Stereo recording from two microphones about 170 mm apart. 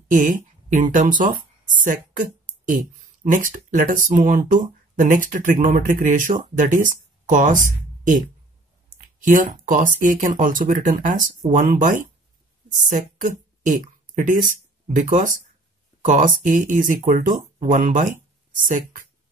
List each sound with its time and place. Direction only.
0.1 s speech: 50° right (ahead or behind)
3.3 s speech: 50° right (ahead or behind)
9.2 s a woman's voice: 50° right (ahead or behind)